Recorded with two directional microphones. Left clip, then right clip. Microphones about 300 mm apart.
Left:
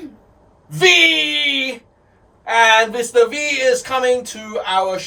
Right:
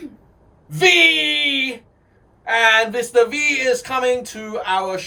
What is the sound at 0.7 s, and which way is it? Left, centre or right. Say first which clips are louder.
Speech: left 1 dB; centre.